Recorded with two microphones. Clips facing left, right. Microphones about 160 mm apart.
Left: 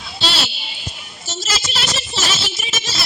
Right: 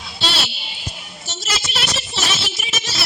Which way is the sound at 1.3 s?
65° right (ahead or behind).